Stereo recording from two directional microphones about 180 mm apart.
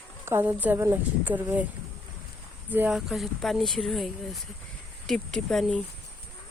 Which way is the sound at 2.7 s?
5° right (ahead or behind).